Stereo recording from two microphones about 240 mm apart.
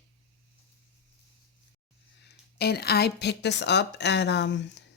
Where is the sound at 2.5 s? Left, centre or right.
Left.